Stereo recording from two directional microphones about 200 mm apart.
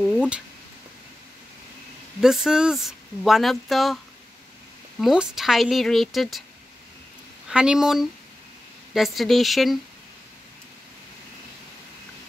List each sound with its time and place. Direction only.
0.0 s a sound: centre (ahead or behind)
2.1 s speech: centre (ahead or behind)
5.0 s speech: 5° right (ahead or behind)
7.4 s speech: 5° right (ahead or behind)